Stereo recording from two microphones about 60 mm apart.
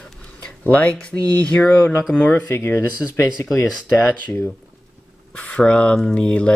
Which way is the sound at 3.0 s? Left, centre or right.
Centre.